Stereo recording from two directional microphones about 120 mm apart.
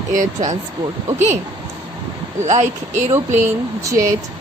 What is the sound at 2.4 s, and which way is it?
Speech, 75° right (ahead or behind).